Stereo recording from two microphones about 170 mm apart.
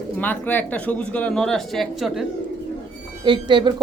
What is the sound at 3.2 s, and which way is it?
Speech, 25° right (ahead or behind).